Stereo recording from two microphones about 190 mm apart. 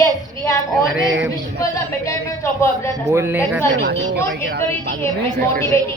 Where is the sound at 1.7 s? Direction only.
15° left (ahead or behind).